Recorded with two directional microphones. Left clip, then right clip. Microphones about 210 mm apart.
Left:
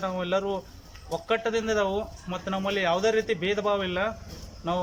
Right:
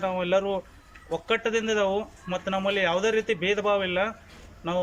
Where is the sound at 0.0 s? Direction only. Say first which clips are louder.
Right 3 dB; 5° right (ahead or behind).